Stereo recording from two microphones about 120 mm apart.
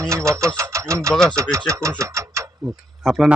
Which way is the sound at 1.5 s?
25° right (ahead or behind).